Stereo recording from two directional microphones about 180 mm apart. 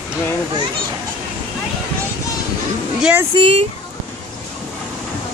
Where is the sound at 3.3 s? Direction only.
30° right (ahead or behind).